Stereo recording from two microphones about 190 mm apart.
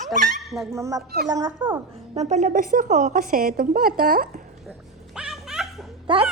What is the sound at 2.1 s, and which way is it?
A woman's voice, 35° right (ahead or behind).